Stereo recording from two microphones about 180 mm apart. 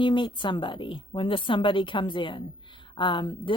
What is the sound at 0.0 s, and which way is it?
A woman's voice, 25° left (ahead or behind).